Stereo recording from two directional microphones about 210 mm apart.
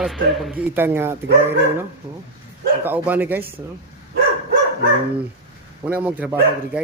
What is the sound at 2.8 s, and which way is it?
Speech, 10° right (ahead or behind).